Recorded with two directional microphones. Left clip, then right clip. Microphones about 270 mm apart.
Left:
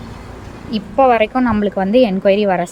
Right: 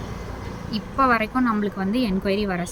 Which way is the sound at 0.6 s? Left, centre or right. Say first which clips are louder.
Left 8 dB; centre.